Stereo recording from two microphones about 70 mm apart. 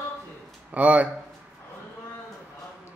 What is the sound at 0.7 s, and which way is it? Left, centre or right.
Speech, right.